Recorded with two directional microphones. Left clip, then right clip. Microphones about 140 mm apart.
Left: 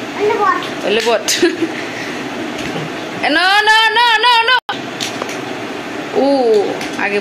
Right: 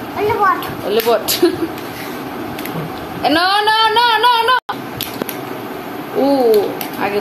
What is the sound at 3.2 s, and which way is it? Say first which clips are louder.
A woman's voice: left 2 dB; 5° left (ahead or behind).